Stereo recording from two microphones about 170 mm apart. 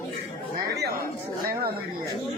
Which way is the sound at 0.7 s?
70° right (ahead or behind).